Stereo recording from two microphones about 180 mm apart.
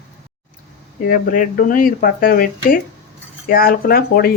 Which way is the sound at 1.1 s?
50° left (ahead or behind).